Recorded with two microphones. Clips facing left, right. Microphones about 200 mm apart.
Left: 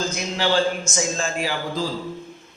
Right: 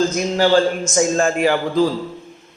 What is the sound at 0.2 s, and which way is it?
A man's voice, 45° right (ahead or behind).